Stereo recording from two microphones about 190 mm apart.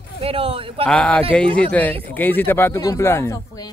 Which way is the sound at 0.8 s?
5° left (ahead or behind).